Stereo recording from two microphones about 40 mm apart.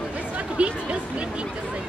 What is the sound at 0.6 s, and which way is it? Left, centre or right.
Speech, right.